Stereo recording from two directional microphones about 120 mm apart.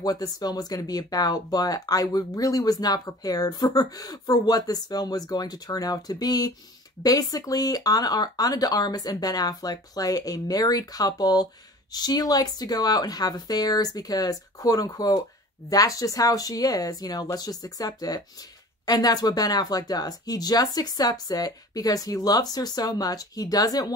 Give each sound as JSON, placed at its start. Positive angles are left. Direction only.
{"t": 0.0, "sound": "speech", "side_deg": 35}